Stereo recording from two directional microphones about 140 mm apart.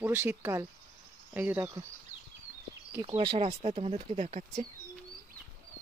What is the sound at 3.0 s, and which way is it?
Speech, 35° right (ahead or behind).